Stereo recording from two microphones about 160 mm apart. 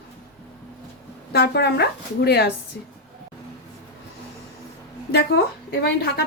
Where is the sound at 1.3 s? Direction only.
90° left.